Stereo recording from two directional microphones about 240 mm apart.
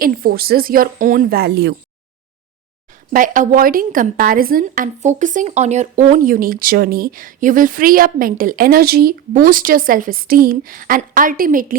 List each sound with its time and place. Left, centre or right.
0.0 s a woman's voice: right
3.1 s a woman's voice: right